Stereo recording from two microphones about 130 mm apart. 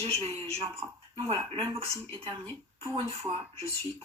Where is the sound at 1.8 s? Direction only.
50° right (ahead or behind).